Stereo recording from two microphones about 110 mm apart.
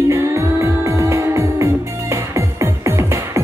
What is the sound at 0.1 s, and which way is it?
Music, 25° right (ahead or behind).